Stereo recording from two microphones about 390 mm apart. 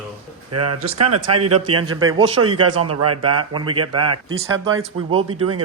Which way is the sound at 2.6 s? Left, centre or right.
Right.